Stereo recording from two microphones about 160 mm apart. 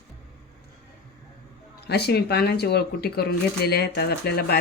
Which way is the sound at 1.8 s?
90° left.